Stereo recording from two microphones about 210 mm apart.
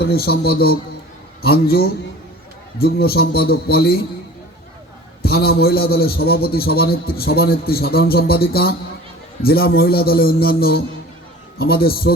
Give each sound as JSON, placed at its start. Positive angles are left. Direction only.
{"t": 0.0, "sound": "a man's voice", "side_deg": 50}
{"t": 5.2, "sound": "a man's voice", "side_deg": 50}